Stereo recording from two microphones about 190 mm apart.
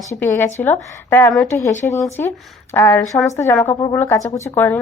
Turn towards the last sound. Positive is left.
turn(degrees=10)  # may be behind; listen again after turning